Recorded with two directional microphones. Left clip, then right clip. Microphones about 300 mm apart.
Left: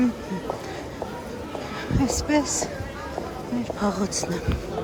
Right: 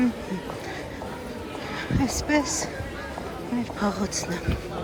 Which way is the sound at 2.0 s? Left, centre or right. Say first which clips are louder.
Left 2 dB; centre.